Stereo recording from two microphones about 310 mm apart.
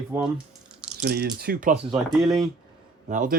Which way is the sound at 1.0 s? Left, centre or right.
Right.